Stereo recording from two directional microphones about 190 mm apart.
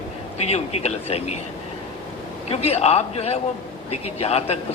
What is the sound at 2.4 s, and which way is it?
A man's voice, 35° left (ahead or behind).